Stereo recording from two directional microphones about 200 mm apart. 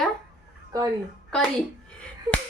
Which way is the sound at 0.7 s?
15° right (ahead or behind).